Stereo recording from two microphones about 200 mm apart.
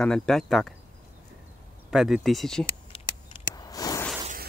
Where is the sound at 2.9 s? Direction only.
25° left (ahead or behind).